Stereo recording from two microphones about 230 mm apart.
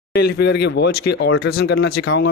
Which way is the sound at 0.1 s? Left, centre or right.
Left.